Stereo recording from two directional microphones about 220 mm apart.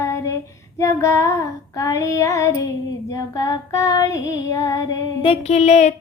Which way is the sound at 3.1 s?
15° left (ahead or behind).